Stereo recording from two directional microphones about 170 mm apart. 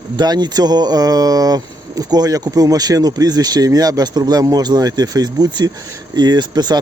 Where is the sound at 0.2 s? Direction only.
25° right (ahead or behind).